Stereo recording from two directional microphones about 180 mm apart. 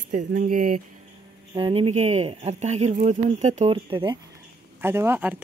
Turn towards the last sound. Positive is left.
turn(degrees=-10)  # may be behind; listen again after turning